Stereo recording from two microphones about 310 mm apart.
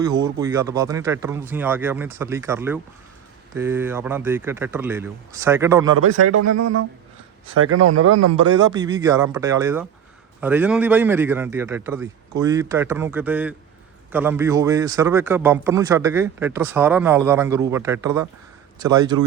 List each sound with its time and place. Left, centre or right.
0.0 s a man's voice: centre
6.1 s speech: right
7.5 s speech: right
8.7 s a man's voice: centre